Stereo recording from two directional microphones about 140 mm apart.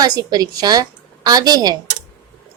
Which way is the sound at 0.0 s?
25° right (ahead or behind).